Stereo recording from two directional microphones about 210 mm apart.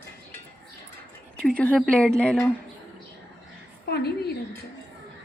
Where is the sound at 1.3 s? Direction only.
5° left (ahead or behind).